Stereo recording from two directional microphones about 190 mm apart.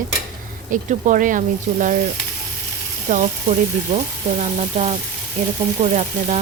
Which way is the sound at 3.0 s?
40° right (ahead or behind).